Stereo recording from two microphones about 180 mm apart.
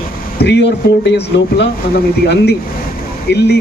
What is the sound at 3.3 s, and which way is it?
Speech, 70° left (ahead or behind).